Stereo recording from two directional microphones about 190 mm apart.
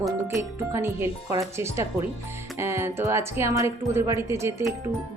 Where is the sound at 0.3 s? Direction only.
15° right (ahead or behind).